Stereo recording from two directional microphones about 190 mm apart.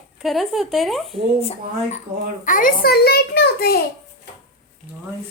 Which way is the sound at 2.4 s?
45° left (ahead or behind).